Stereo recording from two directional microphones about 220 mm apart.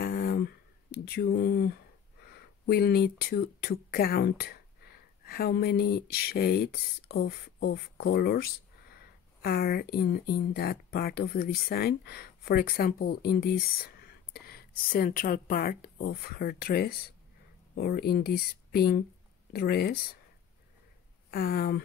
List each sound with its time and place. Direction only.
0.0 s a sound: 45° left (ahead or behind)
2.2 s speech: 45° left (ahead or behind)
21.3 s speech: 45° left (ahead or behind)